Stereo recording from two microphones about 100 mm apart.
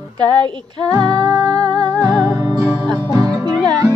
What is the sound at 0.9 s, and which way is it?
Music, 35° right (ahead or behind).